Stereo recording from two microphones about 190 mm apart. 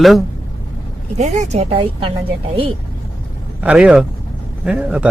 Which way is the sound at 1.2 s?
35° right (ahead or behind).